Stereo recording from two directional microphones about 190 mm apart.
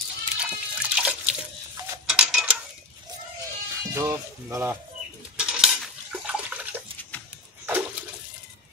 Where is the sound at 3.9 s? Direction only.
15° right (ahead or behind).